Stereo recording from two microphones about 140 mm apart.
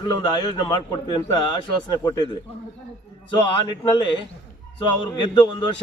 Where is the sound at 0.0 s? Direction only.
30° left (ahead or behind).